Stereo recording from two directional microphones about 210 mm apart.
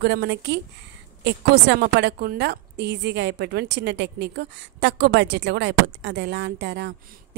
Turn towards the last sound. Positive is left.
turn(degrees=-55)  # may be behind; listen again after turning